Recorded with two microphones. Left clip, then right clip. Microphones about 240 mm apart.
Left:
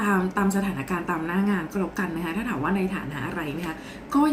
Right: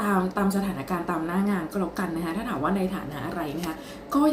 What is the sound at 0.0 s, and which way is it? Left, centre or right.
A woman's voice, centre.